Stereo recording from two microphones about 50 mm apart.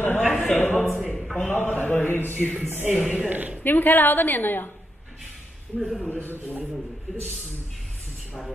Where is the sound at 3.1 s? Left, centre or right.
Right.